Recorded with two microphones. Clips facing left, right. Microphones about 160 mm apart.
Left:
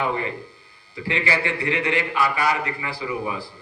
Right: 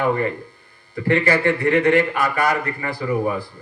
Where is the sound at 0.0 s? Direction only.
50° right (ahead or behind).